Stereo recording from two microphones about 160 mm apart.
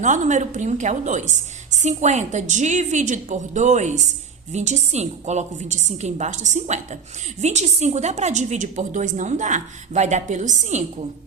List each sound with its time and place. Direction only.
0.0 s a woman's voice: 50° right (ahead or behind)